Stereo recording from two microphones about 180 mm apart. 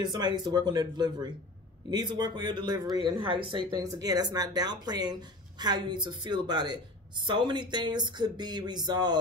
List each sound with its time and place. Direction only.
0.0 s speech: 25° right (ahead or behind)